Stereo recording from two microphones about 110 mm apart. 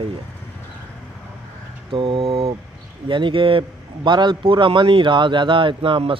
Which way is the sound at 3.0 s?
50° right (ahead or behind).